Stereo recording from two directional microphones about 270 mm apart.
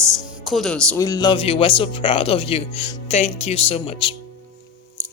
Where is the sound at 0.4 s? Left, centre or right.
Centre; by 4.1 s left.